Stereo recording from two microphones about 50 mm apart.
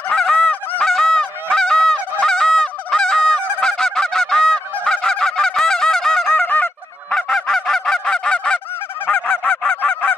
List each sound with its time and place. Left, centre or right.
0.1 s honk: centre
6.4 s honk: left
7.2 s honk: centre
9.1 s goose: centre